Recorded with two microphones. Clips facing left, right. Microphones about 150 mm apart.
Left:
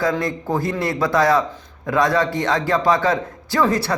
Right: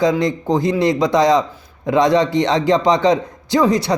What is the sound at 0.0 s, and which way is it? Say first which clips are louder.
A man's voice: right 5 dB; 20° right (ahead or behind).